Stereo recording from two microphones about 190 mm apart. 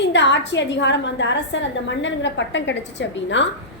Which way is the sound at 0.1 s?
70° left (ahead or behind).